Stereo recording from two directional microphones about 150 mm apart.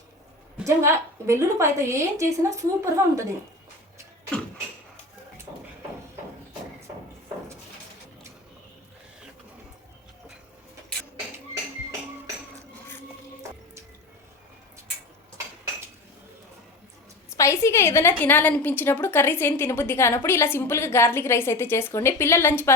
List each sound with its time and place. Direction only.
0.6 s a woman's voice: 20° right (ahead or behind)
17.3 s a woman's voice: 20° left (ahead or behind)